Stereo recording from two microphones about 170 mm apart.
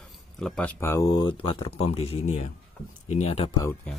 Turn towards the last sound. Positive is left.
turn(degrees=35)  # may be behind; listen again after turning